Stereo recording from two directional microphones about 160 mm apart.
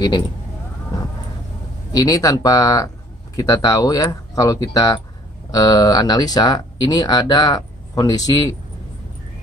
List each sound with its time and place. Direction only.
1.9 s speech: 25° left (ahead or behind)